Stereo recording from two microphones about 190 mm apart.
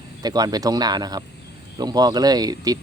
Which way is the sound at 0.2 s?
20° right (ahead or behind).